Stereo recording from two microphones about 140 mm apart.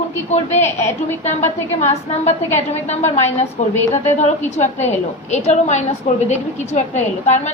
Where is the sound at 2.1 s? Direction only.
50° left (ahead or behind).